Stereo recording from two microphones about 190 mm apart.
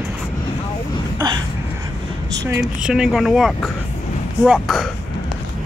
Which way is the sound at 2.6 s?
5° right (ahead or behind).